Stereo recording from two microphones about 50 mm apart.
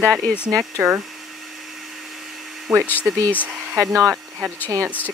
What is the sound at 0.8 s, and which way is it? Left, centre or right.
Speech, right.